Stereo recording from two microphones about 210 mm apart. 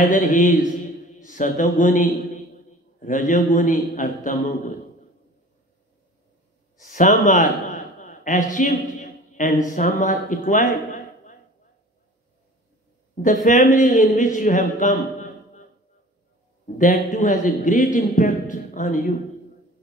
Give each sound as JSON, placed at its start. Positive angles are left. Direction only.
{"t": 0.0, "sound": "a man's voice", "side_deg": 40}
{"t": 6.8, "sound": "a man's voice", "side_deg": 35}
{"t": 13.1, "sound": "speech", "side_deg": 35}
{"t": 16.6, "sound": "a man's voice", "side_deg": 40}